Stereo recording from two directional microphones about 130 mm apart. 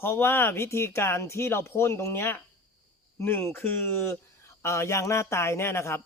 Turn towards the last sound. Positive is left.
turn(degrees=20)  # may be behind; listen again after turning